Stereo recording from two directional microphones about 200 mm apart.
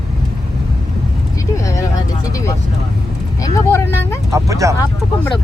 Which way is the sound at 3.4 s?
15° left (ahead or behind).